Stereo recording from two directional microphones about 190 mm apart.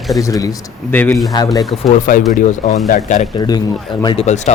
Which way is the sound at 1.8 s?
45° left (ahead or behind).